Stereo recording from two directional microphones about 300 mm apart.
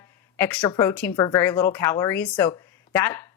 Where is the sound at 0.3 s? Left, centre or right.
Centre.